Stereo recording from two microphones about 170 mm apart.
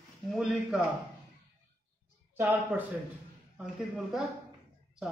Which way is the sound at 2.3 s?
15° right (ahead or behind).